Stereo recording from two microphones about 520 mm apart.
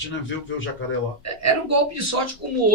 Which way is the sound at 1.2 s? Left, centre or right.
Right.